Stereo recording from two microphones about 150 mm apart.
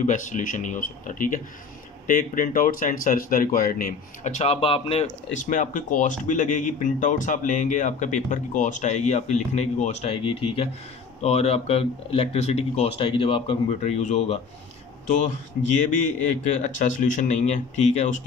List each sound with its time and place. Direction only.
0.0 s speech: 55° left (ahead or behind); by 5.1 s 40° left (ahead or behind)
5.4 s speech: 55° left (ahead or behind); by 13.9 s 35° left (ahead or behind)
13.9 s speech: 50° left (ahead or behind)
15.7 s speech: 55° left (ahead or behind)